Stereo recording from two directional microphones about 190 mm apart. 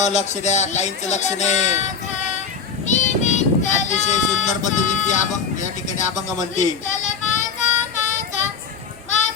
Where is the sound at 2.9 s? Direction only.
40° left (ahead or behind).